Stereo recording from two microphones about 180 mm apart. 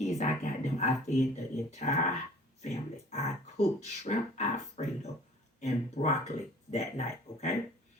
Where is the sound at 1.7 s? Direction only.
40° left (ahead or behind).